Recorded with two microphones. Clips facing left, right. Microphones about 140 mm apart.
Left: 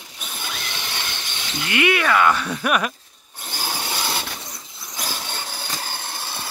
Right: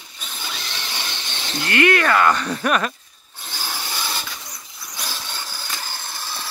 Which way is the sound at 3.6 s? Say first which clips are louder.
Left 3 dB; 15° left (ahead or behind).